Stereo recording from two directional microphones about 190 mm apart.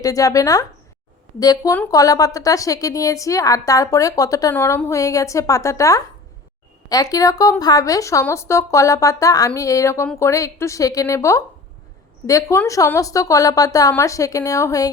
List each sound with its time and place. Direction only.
0.0 s speech: 20° left (ahead or behind)